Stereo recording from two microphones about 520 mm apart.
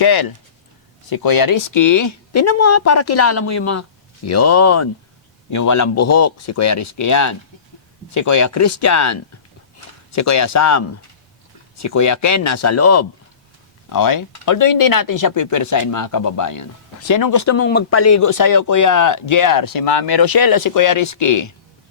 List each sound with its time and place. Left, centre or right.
0.0 s speech: left